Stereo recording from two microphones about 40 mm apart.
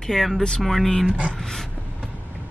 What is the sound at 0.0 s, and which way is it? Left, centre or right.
Speech, centre.